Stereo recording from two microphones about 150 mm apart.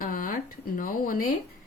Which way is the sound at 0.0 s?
70° left (ahead or behind).